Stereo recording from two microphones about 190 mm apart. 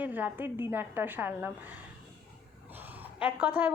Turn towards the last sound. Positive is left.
turn(degrees=-10)  # may be behind; listen again after turning